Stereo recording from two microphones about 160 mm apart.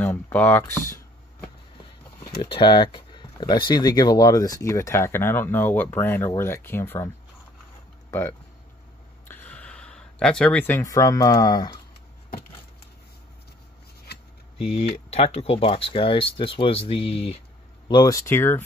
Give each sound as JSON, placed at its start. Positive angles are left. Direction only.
{"t": 0.0, "sound": "speech", "side_deg": 10}
{"t": 2.4, "sound": "speech", "side_deg": 30}
{"t": 8.1, "sound": "speech", "side_deg": 15}
{"t": 14.6, "sound": "speech", "side_deg": 40}
{"t": 17.8, "sound": "speech", "side_deg": 25}